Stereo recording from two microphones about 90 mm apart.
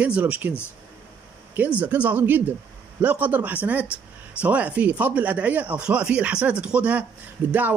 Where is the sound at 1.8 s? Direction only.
15° right (ahead or behind).